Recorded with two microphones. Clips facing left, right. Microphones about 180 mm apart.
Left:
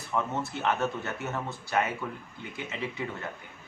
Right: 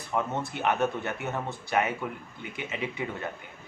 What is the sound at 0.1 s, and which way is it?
A man's voice, 15° right (ahead or behind).